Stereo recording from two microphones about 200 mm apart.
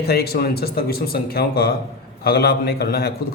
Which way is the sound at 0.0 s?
50° left (ahead or behind).